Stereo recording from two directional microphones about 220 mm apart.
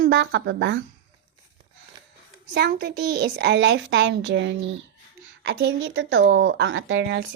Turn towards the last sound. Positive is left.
turn(degrees=-55)  # may be behind; listen again after turning